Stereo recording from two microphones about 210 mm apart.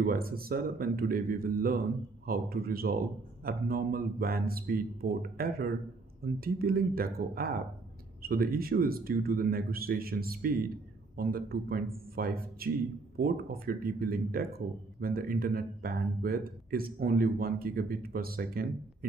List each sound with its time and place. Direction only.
0.0 s speech: 45° right (ahead or behind)